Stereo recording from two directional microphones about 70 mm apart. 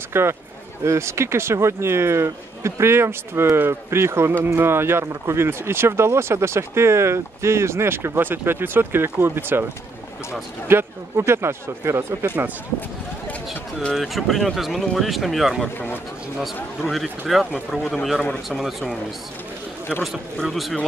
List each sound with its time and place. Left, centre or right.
0.1 s speech: right
10.7 s speech: right
13.9 s speech: centre
16.8 s speech: centre
20.0 s speech: centre